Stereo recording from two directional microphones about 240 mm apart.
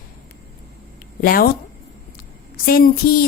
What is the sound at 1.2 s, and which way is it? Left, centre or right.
Speech, left.